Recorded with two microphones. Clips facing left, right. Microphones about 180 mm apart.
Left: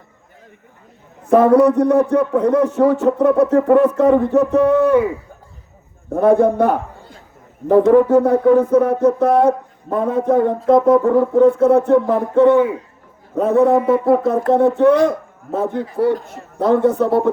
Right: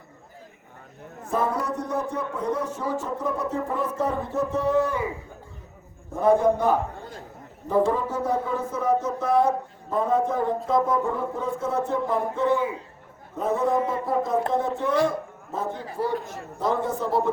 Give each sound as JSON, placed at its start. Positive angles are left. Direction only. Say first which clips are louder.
{"t": 1.3, "sound": "a man's voice", "louder": "left 15 dB", "side_deg": 65}
{"t": 6.1, "sound": "speech", "louder": "left 7 dB", "side_deg": 60}